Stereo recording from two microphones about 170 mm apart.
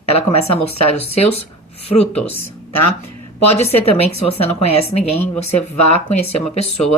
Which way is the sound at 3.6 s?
35° left (ahead or behind).